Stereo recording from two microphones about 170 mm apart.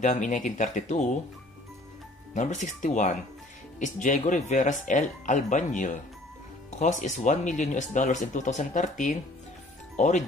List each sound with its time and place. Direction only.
0.0 s speech: 45° left (ahead or behind)
2.3 s speech: 45° left (ahead or behind)